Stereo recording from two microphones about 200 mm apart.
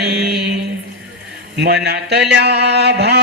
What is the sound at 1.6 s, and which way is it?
Speech, 55° right (ahead or behind).